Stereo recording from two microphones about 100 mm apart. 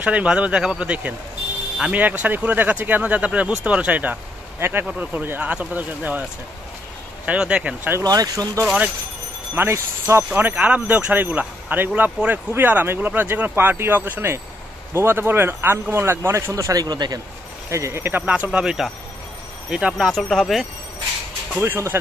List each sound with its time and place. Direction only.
0.0 s speech: 10° right (ahead or behind)
7.2 s speech: 10° right (ahead or behind)
8.0 s speech: 40° right (ahead or behind)
9.6 s speech: 25° right (ahead or behind); by 17.2 s 45° right (ahead or behind)
17.6 s speech: 30° right (ahead or behind); by 20.6 s centre (ahead or behind)
21.5 s speech: 20° right (ahead or behind)